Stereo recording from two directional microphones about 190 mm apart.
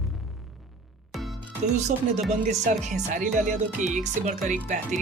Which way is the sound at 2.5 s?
40° right (ahead or behind).